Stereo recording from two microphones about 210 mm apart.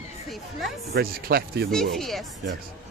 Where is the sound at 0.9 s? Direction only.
45° right (ahead or behind).